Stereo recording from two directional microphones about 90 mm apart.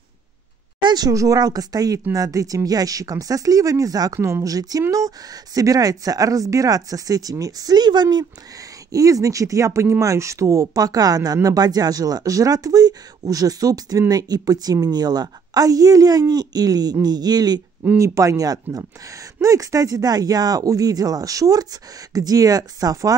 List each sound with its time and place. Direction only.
0.7 s speech: 55° right (ahead or behind)
8.9 s speech: 40° right (ahead or behind)
17.9 s speech: 35° right (ahead or behind)